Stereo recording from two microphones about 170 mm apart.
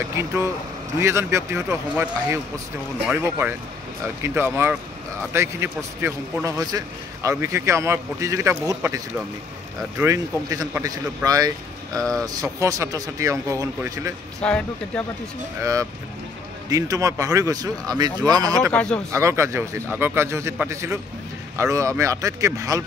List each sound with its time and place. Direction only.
1.0 s a man's voice: 15° right (ahead or behind)
14.4 s speech: 5° left (ahead or behind)
15.6 s speech: 20° right (ahead or behind)
18.7 s speech: 10° left (ahead or behind)
19.1 s a man's voice: 15° right (ahead or behind)